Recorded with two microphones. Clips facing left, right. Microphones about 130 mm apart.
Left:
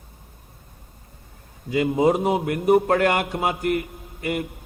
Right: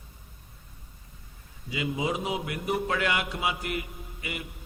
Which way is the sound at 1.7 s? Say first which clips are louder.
Left 11 dB; 50° left (ahead or behind).